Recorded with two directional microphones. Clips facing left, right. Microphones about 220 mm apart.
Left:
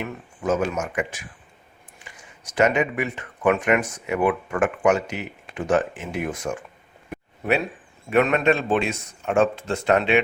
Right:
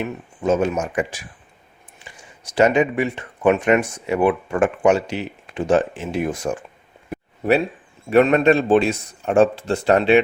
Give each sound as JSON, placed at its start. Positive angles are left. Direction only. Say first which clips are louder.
{"t": 0.0, "sound": "speech", "louder": "right 4 dB", "side_deg": -25}
{"t": 7.1, "sound": "a sound", "louder": "right 5 dB", "side_deg": -35}
{"t": 8.1, "sound": "a man's voice", "louder": "right 5 dB", "side_deg": -35}